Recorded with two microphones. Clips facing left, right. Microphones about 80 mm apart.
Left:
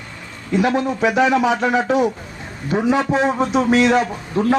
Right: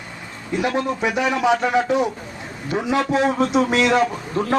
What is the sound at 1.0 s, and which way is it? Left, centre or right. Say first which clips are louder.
Speech: left 5 dB; centre.